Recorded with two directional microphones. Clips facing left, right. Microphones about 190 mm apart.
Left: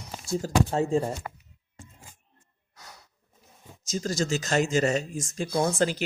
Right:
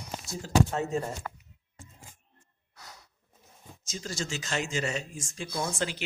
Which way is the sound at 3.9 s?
40° left (ahead or behind).